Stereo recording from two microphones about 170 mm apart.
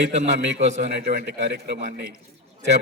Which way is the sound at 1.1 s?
65° right (ahead or behind).